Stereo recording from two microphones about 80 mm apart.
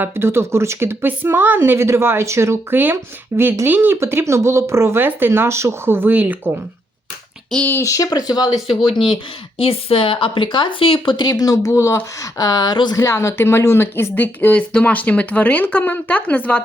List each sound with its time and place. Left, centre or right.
0.0 s speech: right
4.0 s speech: right
7.8 s speech: left
10.0 s speech: left
11.3 s speech: left
13.0 s a woman's voice: left; by 16.6 s centre